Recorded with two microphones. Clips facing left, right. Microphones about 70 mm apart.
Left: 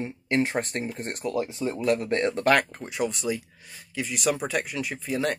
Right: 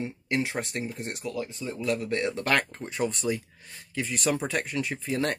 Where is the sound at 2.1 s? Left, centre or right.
Left.